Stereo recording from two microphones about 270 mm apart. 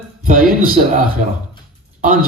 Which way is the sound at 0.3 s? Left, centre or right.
Right.